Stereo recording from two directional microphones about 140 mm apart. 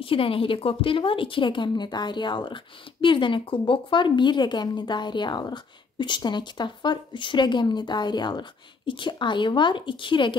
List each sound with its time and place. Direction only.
0.0 s a woman's voice: 40° left (ahead or behind)